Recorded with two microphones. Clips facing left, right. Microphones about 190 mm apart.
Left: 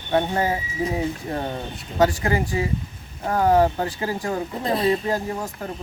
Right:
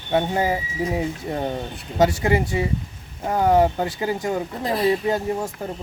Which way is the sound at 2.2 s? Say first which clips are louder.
Right 2 dB; 25° right (ahead or behind).